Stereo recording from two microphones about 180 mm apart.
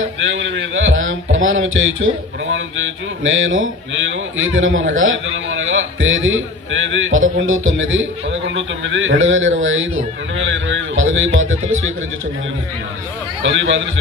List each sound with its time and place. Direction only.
0.3 s a man's voice: 90° right
13.4 s a man's voice: 90° right